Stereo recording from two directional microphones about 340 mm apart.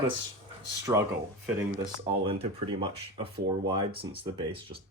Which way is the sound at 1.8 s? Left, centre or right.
Centre.